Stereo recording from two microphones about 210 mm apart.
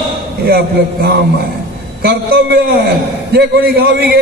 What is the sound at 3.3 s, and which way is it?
Speech, 50° right (ahead or behind).